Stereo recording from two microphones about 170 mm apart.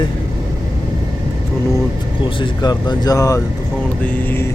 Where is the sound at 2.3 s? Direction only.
25° left (ahead or behind).